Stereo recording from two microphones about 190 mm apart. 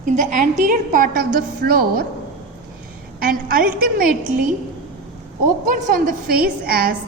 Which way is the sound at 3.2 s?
50° right (ahead or behind).